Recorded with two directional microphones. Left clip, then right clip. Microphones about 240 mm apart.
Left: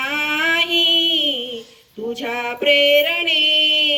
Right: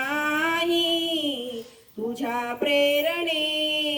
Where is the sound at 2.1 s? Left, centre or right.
Right.